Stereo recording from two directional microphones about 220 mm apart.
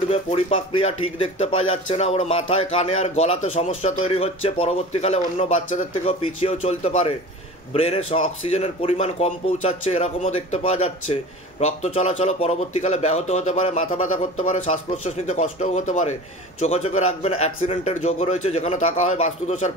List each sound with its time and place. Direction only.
0.1 s speech: 25° left (ahead or behind)